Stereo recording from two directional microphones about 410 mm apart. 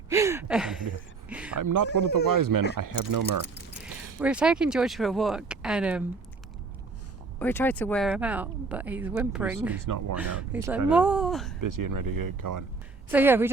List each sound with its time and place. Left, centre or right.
0.1 s a sound: centre
1.5 s speech: right
4.2 s speech: centre
7.3 s speech: centre
9.8 s speech: right
10.2 s speech: centre
11.6 s speech: right
13.1 s speech: centre